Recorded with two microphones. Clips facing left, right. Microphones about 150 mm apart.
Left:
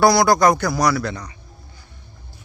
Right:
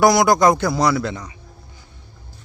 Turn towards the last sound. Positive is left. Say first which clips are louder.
# right 1 dB
turn(degrees=-20)  # may be behind; listen again after turning